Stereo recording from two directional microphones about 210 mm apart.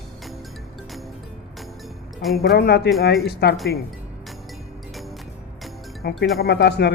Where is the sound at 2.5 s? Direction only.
50° left (ahead or behind).